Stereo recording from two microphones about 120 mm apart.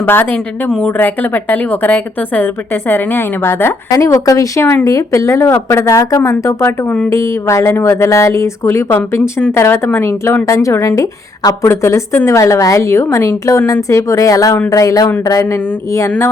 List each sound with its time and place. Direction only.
0.0 s speech: 20° left (ahead or behind)
0.7 s a woman's voice: 5° left (ahead or behind); by 16.3 s 20° left (ahead or behind)